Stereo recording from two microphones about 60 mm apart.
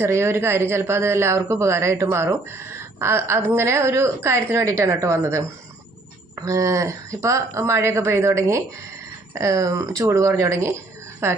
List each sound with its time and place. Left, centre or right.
0.0 s speech: right